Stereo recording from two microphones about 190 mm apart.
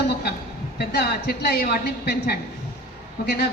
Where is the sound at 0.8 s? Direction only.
60° left (ahead or behind).